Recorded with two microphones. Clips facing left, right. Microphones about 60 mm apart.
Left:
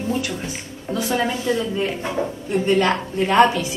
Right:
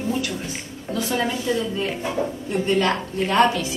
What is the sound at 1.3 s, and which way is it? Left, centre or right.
A woman's voice, left.